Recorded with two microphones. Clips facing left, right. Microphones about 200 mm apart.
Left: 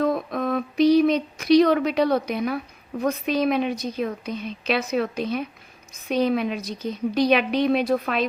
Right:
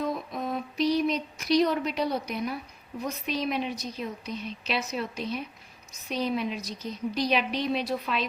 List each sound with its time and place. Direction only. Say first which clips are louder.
0.0 s a woman's voice: left 8 dB; 65° left (ahead or behind)